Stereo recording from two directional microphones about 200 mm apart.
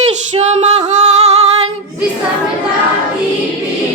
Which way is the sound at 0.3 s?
35° right (ahead or behind).